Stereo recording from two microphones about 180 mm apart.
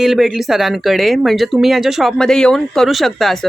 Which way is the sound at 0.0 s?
Centre (ahead or behind).